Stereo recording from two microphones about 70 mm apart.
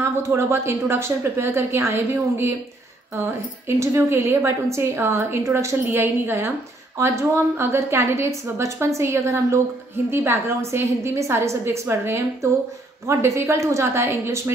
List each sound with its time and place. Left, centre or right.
0.0 s a woman's voice: right
3.6 s a woman's voice: right